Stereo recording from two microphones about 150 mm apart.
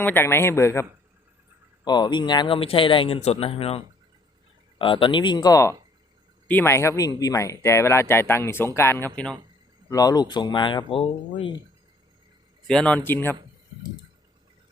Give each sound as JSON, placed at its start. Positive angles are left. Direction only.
{"t": 0.0, "sound": "speech", "side_deg": 15}
{"t": 1.8, "sound": "speech", "side_deg": 30}
{"t": 9.9, "sound": "speech", "side_deg": 25}
{"t": 12.6, "sound": "speech", "side_deg": 5}